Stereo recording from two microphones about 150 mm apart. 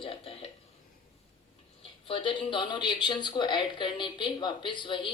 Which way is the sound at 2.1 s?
35° left (ahead or behind).